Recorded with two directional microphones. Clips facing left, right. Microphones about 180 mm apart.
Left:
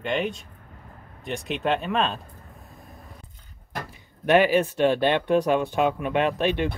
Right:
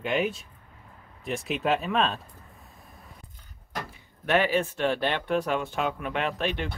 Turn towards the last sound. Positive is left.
turn(degrees=15)  # may be behind; listen again after turning